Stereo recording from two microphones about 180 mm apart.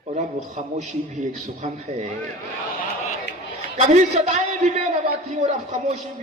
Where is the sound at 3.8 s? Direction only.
40° right (ahead or behind).